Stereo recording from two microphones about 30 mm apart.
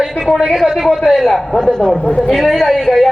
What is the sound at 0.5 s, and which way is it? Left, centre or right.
Speech, centre.